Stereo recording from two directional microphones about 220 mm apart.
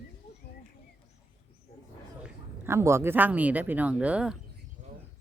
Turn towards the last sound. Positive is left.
turn(degrees=-5)  # may be behind; listen again after turning